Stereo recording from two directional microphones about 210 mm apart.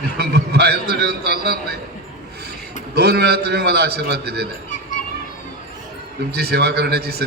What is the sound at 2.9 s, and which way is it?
A man's voice, 50° right (ahead or behind).